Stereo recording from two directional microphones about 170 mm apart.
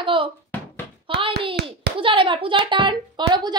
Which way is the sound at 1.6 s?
75° right (ahead or behind).